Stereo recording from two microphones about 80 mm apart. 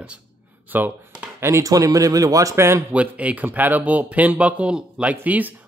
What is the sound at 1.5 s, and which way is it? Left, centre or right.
Speech, right.